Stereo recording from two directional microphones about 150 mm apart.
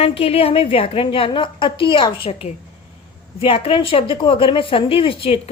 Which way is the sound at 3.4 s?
40° left (ahead or behind).